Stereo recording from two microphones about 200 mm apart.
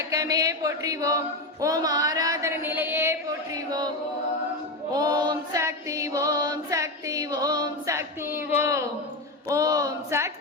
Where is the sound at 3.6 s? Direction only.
20° right (ahead or behind).